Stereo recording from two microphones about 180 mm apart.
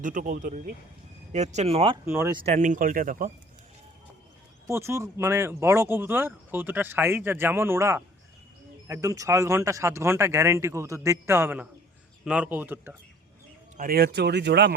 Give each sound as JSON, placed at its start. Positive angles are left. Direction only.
{"t": 0.0, "sound": "speech", "side_deg": -50}
{"t": 2.0, "sound": "speech", "side_deg": -15}
{"t": 2.4, "sound": "speech", "side_deg": -40}
{"t": 4.7, "sound": "speech", "side_deg": -15}
{"t": 13.7, "sound": "speech", "side_deg": -55}